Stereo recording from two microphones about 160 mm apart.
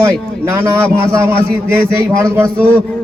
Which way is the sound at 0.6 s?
15° right (ahead or behind).